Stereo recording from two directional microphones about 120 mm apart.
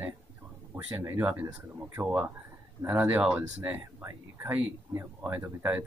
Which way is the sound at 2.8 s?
15° right (ahead or behind).